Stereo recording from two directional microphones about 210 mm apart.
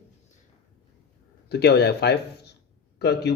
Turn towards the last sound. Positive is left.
turn(degrees=50)  # may be behind; listen again after turning